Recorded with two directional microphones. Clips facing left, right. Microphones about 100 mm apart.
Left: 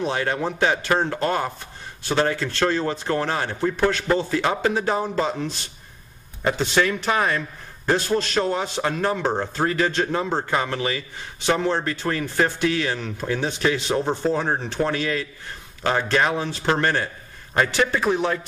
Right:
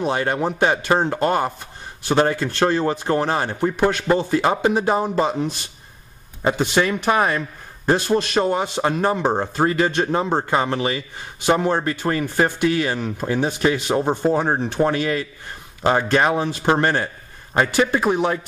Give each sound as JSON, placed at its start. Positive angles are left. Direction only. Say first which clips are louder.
{"t": 0.0, "sound": "a man's voice", "louder": "right 3 dB", "side_deg": -15}